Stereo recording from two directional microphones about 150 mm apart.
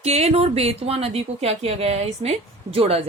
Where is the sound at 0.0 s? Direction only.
45° right (ahead or behind).